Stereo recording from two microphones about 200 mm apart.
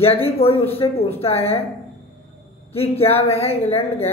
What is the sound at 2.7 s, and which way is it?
Speech, 30° left (ahead or behind).